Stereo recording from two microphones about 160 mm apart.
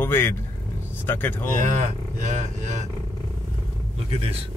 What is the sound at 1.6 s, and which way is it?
Speech, 50° right (ahead or behind).